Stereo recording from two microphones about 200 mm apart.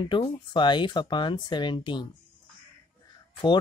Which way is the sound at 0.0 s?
25° left (ahead or behind).